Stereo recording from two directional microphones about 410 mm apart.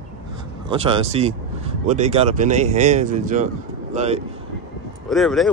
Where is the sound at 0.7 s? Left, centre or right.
Centre.